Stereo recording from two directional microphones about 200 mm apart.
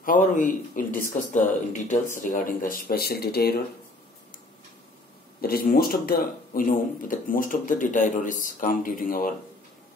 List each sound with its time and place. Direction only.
0.0 s speech: 40° left (ahead or behind)
5.4 s speech: 50° left (ahead or behind)